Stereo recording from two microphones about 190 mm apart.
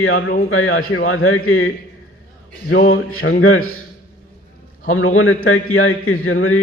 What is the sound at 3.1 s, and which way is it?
Speech, 90° left.